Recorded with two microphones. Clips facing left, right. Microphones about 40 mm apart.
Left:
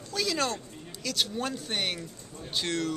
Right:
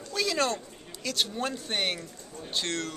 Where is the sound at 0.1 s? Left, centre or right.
Centre.